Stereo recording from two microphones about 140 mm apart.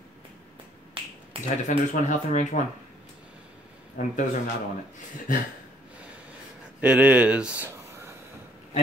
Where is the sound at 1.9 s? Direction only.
60° left (ahead or behind).